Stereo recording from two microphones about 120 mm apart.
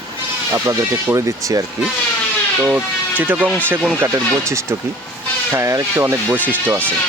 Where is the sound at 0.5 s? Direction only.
25° right (ahead or behind).